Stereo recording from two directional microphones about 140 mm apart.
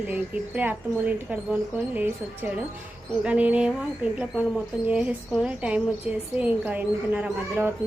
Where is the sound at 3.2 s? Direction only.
10° right (ahead or behind).